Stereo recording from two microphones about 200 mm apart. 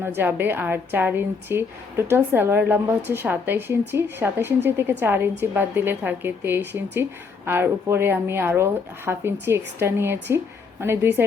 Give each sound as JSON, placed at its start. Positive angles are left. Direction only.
{"t": 0.0, "sound": "a woman's voice", "side_deg": -10}